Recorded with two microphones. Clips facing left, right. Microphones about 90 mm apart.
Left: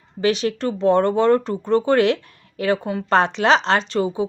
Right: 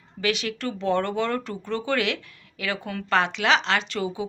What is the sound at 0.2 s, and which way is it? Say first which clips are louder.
Speech: left 7 dB; 35° left (ahead or behind).